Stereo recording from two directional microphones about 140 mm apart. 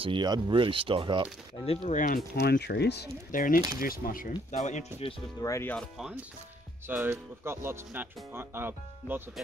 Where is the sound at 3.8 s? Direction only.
90° left.